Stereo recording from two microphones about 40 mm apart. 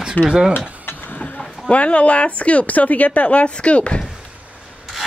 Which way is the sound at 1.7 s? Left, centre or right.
Left.